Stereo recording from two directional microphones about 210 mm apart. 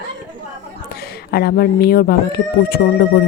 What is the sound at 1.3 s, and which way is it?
Speech, 45° left (ahead or behind).